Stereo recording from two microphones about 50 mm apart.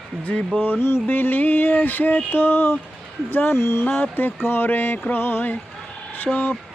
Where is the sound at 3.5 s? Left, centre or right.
Left.